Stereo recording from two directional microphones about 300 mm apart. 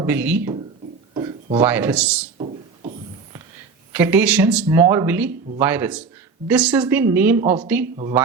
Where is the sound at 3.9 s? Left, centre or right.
Centre.